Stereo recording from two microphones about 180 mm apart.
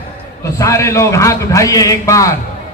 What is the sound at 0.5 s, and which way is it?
A man's voice, 15° left (ahead or behind).